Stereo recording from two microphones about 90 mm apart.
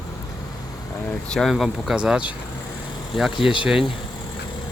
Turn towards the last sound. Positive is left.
turn(degrees=70)  # may be behind; listen again after turning